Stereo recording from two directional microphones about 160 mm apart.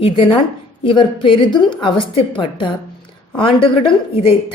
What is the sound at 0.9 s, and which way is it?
A woman's voice, 30° left (ahead or behind).